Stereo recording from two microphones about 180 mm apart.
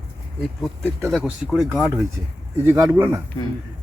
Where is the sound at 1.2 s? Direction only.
5° right (ahead or behind).